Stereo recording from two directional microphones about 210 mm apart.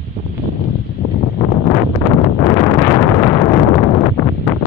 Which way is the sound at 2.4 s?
20° left (ahead or behind).